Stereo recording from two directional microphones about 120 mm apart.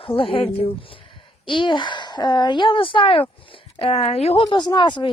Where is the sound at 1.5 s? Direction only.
45° left (ahead or behind); by 4.4 s 60° left (ahead or behind).